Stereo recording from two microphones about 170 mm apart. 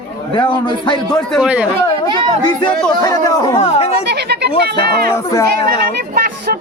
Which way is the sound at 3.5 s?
35° left (ahead or behind).